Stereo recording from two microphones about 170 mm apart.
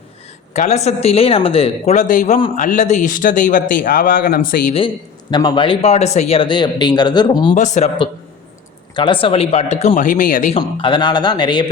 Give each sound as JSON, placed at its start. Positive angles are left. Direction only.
{"t": 0.5, "sound": "speech", "side_deg": 40}
{"t": 5.3, "sound": "speech", "side_deg": 25}
{"t": 7.5, "sound": "speech", "side_deg": 45}
{"t": 9.0, "sound": "speech", "side_deg": 30}
{"t": 9.9, "sound": "speech", "side_deg": 50}
{"t": 10.5, "sound": "speech", "side_deg": 30}